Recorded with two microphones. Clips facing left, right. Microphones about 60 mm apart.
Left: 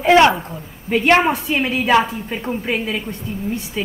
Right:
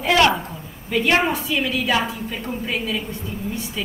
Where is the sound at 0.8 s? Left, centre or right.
Left.